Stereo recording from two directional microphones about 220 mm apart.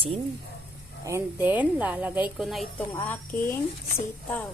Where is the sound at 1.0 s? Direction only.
10° right (ahead or behind).